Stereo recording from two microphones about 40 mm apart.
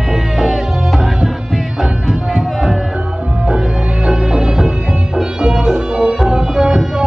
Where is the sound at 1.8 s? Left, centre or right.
Centre.